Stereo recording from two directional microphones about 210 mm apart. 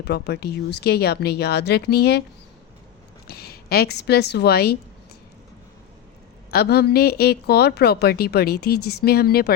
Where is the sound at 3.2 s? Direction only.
50° left (ahead or behind).